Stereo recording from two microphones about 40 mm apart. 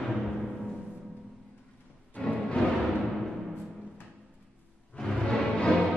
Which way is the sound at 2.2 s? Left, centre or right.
Left.